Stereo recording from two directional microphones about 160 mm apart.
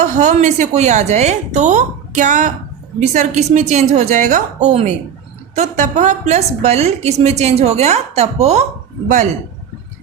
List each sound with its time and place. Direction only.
0.0 s a woman's voice: 50° right (ahead or behind)